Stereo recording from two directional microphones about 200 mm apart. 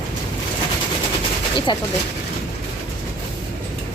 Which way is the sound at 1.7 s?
25° left (ahead or behind).